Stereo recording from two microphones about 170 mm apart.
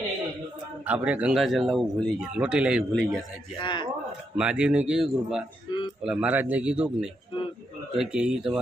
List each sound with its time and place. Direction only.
0.9 s speech: 10° right (ahead or behind)
3.6 s speech: 25° left (ahead or behind)
4.4 s speech: 5° right (ahead or behind)